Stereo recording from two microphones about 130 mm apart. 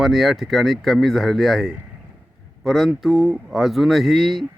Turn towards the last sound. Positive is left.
turn(degrees=0)  # may be behind; listen again after turning